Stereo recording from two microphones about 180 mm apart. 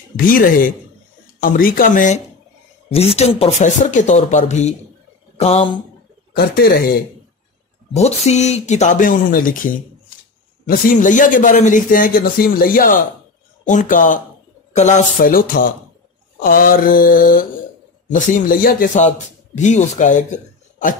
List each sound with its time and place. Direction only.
0.1 s a man's voice: 50° left (ahead or behind)
2.9 s a man's voice: 35° left (ahead or behind)
6.3 s speech: 55° left (ahead or behind)
7.9 s a man's voice: 40° left (ahead or behind)